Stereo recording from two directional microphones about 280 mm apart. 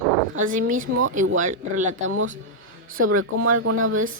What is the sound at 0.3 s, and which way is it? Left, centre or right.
Speech, right.